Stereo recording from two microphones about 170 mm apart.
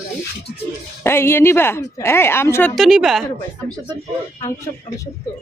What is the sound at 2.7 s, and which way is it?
Speech, centre (ahead or behind).